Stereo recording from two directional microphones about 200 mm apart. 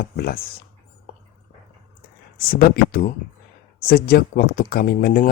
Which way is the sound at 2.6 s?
45° left (ahead or behind).